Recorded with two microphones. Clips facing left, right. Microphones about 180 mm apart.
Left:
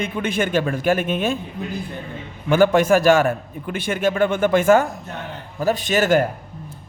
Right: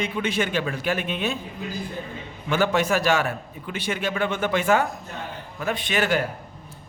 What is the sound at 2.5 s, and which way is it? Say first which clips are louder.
A man's voice: left 7 dB; 50° left (ahead or behind).